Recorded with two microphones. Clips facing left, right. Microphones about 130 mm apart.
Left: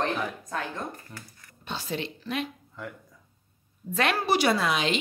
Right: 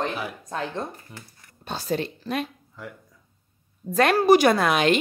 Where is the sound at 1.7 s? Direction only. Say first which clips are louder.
Right 5 dB; 40° right (ahead or behind).